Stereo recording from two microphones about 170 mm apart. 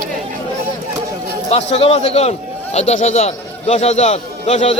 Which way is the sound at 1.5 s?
40° left (ahead or behind).